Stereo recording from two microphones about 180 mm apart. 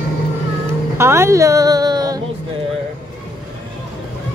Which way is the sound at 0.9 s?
15° right (ahead or behind).